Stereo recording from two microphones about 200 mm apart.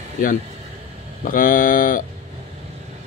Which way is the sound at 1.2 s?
45° left (ahead or behind).